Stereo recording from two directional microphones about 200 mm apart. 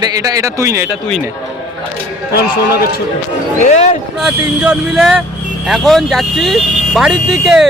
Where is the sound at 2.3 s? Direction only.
50° left (ahead or behind).